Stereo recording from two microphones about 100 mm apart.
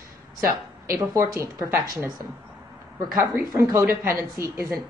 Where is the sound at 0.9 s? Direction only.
30° right (ahead or behind).